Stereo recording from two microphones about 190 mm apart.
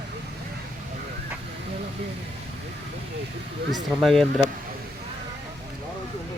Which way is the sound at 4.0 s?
Centre (ahead or behind).